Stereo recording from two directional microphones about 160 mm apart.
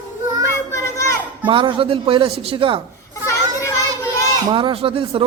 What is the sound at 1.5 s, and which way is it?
A man's voice, 35° right (ahead or behind).